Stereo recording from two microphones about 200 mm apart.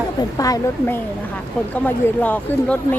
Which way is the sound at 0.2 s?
15° left (ahead or behind).